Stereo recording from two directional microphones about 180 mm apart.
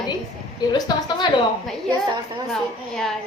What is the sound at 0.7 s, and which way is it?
Speech, 25° left (ahead or behind).